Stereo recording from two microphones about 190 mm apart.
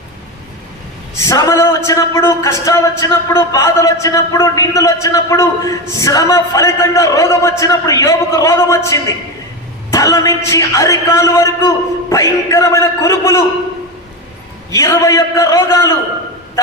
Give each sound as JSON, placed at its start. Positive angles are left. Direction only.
{"t": 1.3, "sound": "a man's voice", "side_deg": 15}
{"t": 14.7, "sound": "a man's voice", "side_deg": 15}